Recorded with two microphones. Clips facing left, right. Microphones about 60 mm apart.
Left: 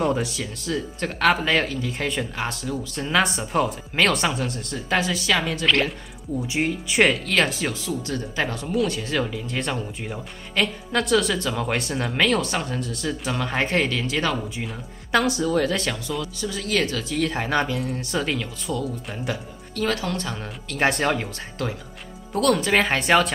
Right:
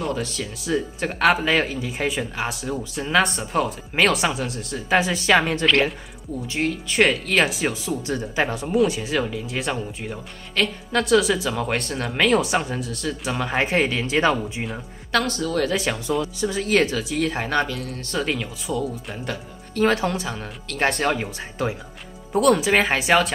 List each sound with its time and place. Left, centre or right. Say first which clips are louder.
0.1 s speech: left 2 dB; centre
0.7 s speech: right 3 dB; centre
4.9 s speech: right 4 dB; right
5.7 s speech: even; centre
6.4 s speech: right 1 dB; centre
7.0 s speech: right 1 dB; centre; by 14.4 s right
15.0 s speech: left 2 dB; centre
16.2 s speech: right 5 dB; right
16.9 s speech: right 1 dB; centre
17.6 s speech: left 3 dB; centre
19.7 s speech: right 5 dB; right
20.2 s speech: right 1 dB; centre
22.3 s speech: right 2 dB; centre